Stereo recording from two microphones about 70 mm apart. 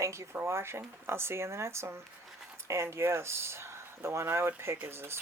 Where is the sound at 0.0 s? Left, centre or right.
Right.